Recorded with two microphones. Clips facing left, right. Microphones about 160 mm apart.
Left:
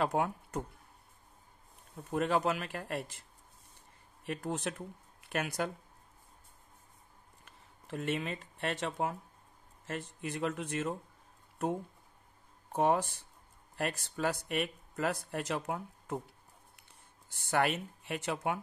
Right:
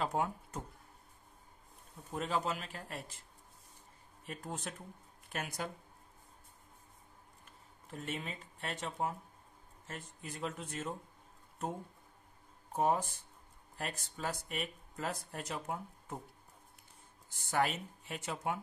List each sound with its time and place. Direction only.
0.0 s speech: 65° left (ahead or behind)
2.0 s speech: 65° left (ahead or behind)
4.3 s speech: 75° left (ahead or behind)
7.4 s speech: 85° left
12.7 s speech: 75° left (ahead or behind)
17.3 s speech: 70° left (ahead or behind)